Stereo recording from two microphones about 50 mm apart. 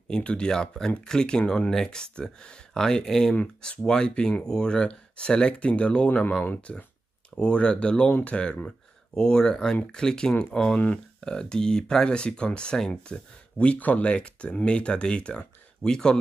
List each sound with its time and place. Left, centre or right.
0.2 s speech: left
0.5 s speech: centre
13.7 s speech: left; by 16.2 s centre